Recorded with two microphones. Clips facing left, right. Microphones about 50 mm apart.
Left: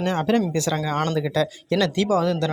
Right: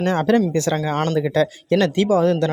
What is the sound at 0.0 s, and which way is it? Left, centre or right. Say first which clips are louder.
Speech: right 4 dB; right.